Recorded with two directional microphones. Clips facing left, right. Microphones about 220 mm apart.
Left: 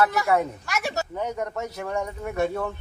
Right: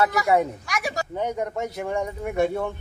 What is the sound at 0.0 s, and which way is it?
A man's voice, 15° right (ahead or behind).